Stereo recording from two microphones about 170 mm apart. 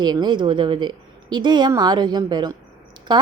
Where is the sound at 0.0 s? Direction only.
25° right (ahead or behind).